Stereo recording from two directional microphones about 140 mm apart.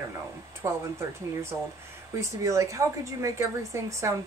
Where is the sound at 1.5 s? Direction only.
25° right (ahead or behind).